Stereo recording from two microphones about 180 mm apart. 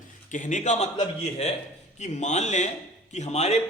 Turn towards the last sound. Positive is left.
turn(degrees=40)  # may be behind; listen again after turning